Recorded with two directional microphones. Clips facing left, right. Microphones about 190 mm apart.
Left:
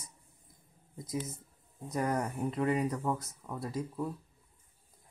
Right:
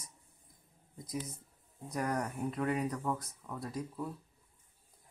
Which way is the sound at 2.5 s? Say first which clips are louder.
Left 4 dB; 5° left (ahead or behind).